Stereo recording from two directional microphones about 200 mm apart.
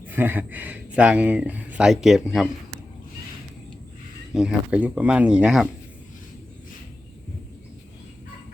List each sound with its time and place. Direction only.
0.0 s speech: 10° right (ahead or behind)
4.4 s speech: 5° right (ahead or behind)